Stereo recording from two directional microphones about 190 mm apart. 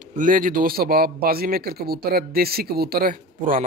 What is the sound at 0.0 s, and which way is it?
Speech, 45° right (ahead or behind).